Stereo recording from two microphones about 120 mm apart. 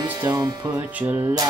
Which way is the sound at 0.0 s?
35° right (ahead or behind).